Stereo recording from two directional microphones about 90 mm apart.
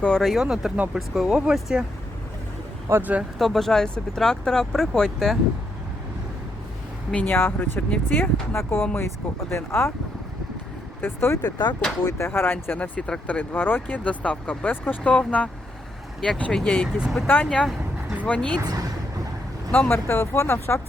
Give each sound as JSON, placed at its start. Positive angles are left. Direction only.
{"t": 0.2, "sound": "speech", "side_deg": 0}
{"t": 2.9, "sound": "speech", "side_deg": -15}
{"t": 3.3, "sound": "speech", "side_deg": 0}
{"t": 7.1, "sound": "speech", "side_deg": 15}
{"t": 11.0, "sound": "speech", "side_deg": 30}
{"t": 11.4, "sound": "speech", "side_deg": 50}
{"t": 12.0, "sound": "speech", "side_deg": 30}
{"t": 17.0, "sound": "speech", "side_deg": 0}
{"t": 17.2, "sound": "speech", "side_deg": 15}
{"t": 18.5, "sound": "speech", "side_deg": -40}
{"t": 19.9, "sound": "speech", "side_deg": 25}